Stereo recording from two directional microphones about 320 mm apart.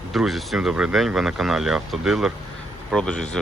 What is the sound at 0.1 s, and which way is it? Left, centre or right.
Speech, centre.